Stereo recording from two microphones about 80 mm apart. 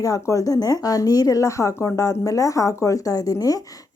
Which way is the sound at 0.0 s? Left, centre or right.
Left.